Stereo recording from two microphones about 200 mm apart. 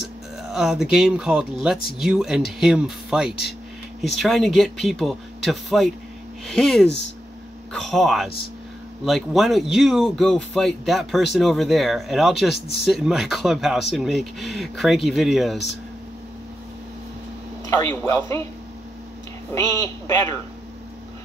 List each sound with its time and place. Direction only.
0.4 s speech: centre (ahead or behind)
17.6 s speech: 15° left (ahead or behind)
19.5 s speech: 15° left (ahead or behind)